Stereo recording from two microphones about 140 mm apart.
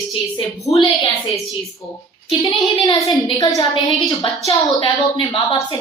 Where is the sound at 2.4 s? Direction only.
35° left (ahead or behind).